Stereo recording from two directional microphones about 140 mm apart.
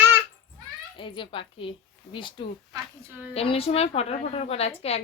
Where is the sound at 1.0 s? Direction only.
35° left (ahead or behind).